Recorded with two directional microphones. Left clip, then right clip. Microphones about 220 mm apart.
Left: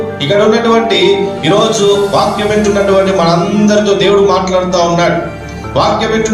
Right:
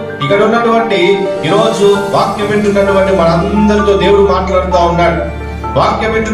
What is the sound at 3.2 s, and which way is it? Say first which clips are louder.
Music: even; 50° left (ahead or behind).